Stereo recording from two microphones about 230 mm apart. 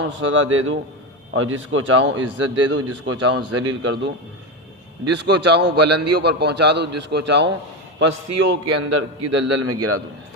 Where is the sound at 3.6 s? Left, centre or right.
Right.